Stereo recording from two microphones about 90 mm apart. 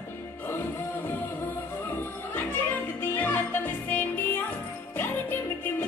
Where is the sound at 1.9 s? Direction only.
20° left (ahead or behind).